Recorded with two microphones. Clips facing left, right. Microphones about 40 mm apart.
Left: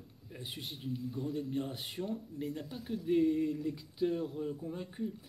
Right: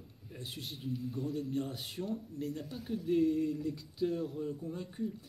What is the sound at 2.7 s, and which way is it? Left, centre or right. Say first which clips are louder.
Speech: even; centre.